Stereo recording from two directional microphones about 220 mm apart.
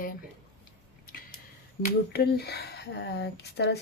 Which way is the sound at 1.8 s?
45° left (ahead or behind).